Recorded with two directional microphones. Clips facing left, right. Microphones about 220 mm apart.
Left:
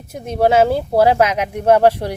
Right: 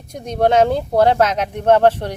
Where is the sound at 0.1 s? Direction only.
5° left (ahead or behind).